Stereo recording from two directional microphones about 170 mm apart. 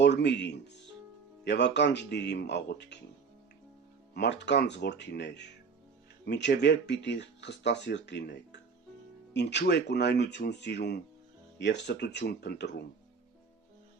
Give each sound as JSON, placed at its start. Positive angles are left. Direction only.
{"t": 0.0, "sound": "speech", "side_deg": 90}
{"t": 4.1, "sound": "speech", "side_deg": 80}
{"t": 11.5, "sound": "speech", "side_deg": 90}